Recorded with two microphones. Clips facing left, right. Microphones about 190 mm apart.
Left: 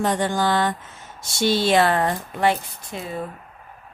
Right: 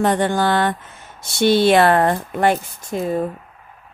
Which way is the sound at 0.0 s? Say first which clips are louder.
Right 4 dB; 60° right (ahead or behind).